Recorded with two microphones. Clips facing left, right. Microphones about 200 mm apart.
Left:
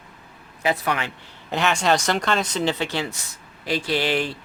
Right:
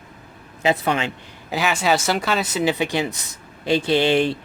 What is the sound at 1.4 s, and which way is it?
Speech, 5° right (ahead or behind).